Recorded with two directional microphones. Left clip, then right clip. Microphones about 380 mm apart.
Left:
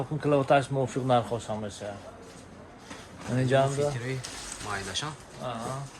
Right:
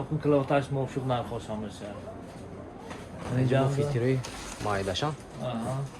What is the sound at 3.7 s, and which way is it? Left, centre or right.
Speech, centre.